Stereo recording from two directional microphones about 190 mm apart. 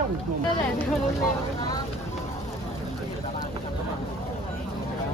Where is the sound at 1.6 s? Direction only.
20° left (ahead or behind).